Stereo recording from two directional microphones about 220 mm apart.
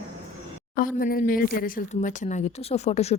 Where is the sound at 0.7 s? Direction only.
40° left (ahead or behind).